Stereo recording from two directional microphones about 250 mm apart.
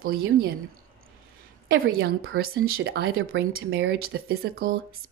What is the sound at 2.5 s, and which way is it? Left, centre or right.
Speech, right.